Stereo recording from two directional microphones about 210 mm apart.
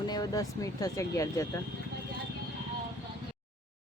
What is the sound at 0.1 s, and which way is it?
Speech, 20° left (ahead or behind).